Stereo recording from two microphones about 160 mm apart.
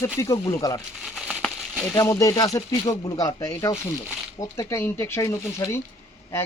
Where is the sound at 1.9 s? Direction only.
20° left (ahead or behind).